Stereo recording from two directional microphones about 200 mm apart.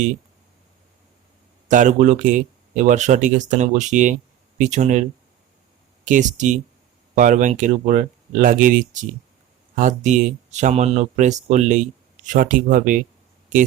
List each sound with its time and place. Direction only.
1.6 s speech: 40° right (ahead or behind)
6.1 s speech: 40° right (ahead or behind)